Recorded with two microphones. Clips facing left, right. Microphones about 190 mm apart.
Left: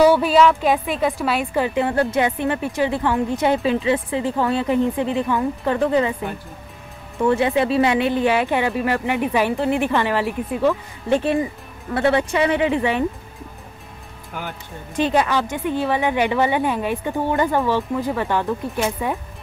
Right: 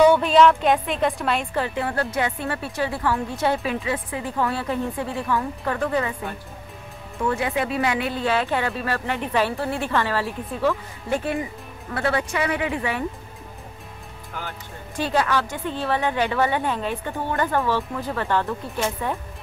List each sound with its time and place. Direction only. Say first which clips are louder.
0.0 s a woman's voice: left 1 dB; 5° left (ahead or behind); by 13.0 s 25° left (ahead or behind)
15.0 s a woman's voice: left 4 dB; 20° left (ahead or behind)